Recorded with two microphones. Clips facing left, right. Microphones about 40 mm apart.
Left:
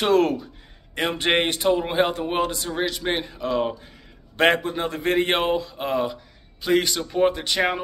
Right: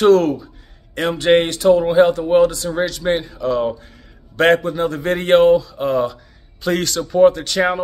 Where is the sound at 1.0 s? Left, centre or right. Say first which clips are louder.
Right 7 dB; left.